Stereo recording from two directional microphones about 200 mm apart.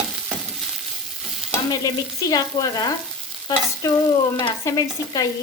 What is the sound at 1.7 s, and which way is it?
Frying, 20° left (ahead or behind).